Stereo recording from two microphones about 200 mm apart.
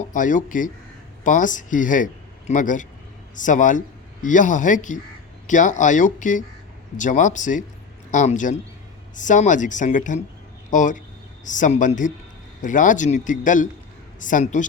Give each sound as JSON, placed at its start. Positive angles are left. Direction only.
{"t": 0.1, "sound": "a man's voice", "side_deg": 40}